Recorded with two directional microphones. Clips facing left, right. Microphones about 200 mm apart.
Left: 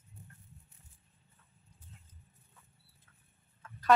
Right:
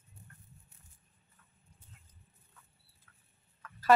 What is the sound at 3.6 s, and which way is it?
Chicken, 25° left (ahead or behind).